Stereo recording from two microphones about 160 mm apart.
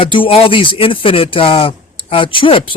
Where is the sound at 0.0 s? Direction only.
35° left (ahead or behind).